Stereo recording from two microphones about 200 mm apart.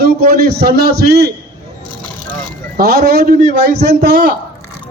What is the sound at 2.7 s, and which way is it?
A man's voice, 50° right (ahead or behind).